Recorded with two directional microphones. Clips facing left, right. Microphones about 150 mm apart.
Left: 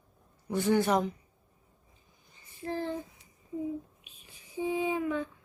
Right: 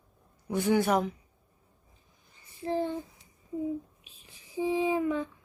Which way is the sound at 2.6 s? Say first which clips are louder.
Right 4 dB; 25° right (ahead or behind).